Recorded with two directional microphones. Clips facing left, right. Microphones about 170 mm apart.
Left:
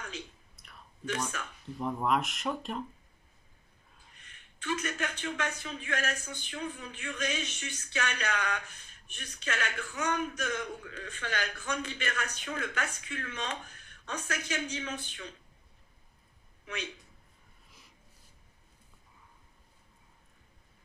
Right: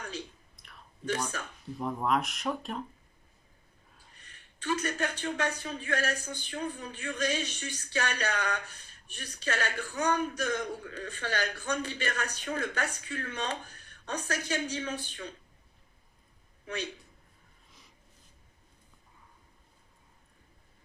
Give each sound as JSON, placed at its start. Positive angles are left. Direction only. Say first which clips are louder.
{"t": 1.3, "sound": "speech", "louder": "right 1 dB", "side_deg": -35}
{"t": 1.8, "sound": "speech", "louder": "even", "side_deg": 0}
{"t": 4.1, "sound": "speech", "louder": "right 1 dB", "side_deg": -35}
{"t": 16.6, "sound": "speech", "louder": "right 3 dB", "side_deg": -35}